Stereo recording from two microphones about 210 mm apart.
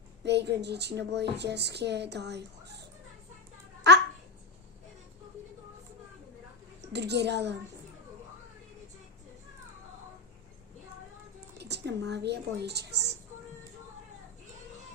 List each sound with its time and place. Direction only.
0.3 s a woman's voice: 55° right (ahead or behind)
3.9 s a child's voice: 55° right (ahead or behind)
6.8 s a child's voice: 55° right (ahead or behind)
11.5 s a woman's voice: 55° right (ahead or behind)